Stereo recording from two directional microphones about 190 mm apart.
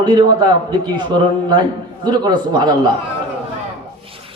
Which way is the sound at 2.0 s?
20° right (ahead or behind).